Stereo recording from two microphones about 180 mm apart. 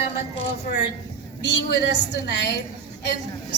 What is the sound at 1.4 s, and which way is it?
Speech, 70° left (ahead or behind).